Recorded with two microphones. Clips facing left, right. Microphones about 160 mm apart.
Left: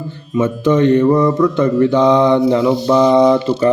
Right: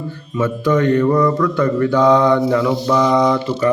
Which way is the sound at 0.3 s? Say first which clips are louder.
Left 3 dB; 20° left (ahead or behind).